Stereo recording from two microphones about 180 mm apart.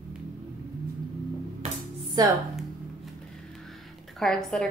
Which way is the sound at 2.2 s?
20° right (ahead or behind).